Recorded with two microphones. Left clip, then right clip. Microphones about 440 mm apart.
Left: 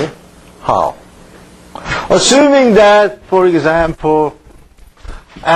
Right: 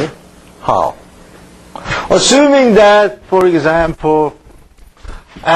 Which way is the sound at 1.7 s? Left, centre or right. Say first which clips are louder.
Even; left.